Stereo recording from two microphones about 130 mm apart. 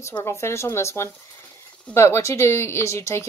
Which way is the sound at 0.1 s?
20° left (ahead or behind).